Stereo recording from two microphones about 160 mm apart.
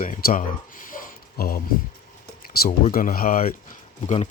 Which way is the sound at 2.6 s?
60° left (ahead or behind).